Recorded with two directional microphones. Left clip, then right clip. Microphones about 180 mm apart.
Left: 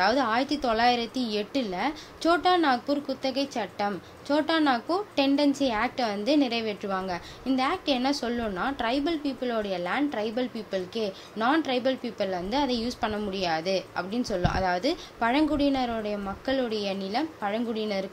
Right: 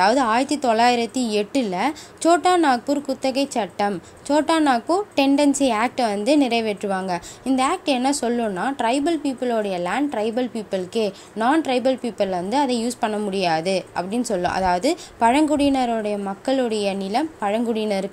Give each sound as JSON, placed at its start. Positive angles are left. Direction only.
{"t": 0.0, "sound": "a woman's voice", "side_deg": -20}